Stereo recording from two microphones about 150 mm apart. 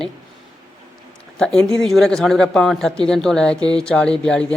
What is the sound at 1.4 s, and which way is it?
Speech, 5° left (ahead or behind).